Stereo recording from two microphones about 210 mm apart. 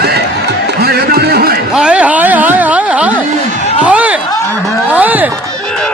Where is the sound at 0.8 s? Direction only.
50° right (ahead or behind).